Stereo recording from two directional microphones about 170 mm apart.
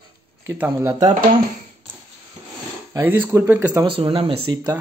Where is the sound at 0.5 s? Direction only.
15° right (ahead or behind).